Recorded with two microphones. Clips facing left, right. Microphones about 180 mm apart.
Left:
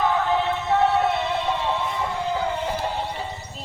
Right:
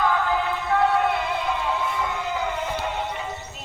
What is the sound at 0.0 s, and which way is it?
Music, 30° left (ahead or behind).